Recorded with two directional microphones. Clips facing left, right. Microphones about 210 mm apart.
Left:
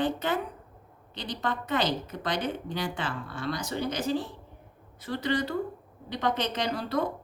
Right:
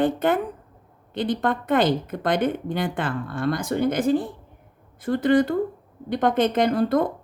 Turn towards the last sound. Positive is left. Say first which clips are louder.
# right 9 dB
turn(degrees=-50)  # may be behind; listen again after turning